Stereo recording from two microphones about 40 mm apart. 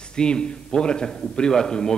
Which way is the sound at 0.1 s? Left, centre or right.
Left.